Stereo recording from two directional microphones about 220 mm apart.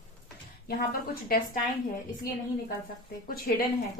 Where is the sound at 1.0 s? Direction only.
40° left (ahead or behind).